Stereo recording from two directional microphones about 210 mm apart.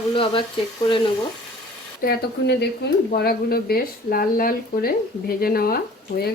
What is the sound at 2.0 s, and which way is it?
Speech, 50° left (ahead or behind).